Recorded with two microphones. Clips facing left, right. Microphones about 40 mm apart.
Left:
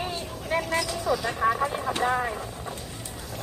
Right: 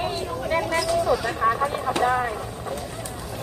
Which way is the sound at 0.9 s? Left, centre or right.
Centre.